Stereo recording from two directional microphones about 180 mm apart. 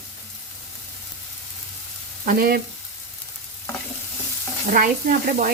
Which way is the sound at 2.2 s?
55° right (ahead or behind).